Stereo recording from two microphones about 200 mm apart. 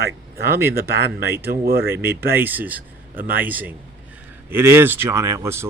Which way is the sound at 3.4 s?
10° right (ahead or behind).